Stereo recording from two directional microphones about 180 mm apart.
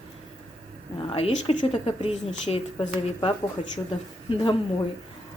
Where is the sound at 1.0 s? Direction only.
35° left (ahead or behind).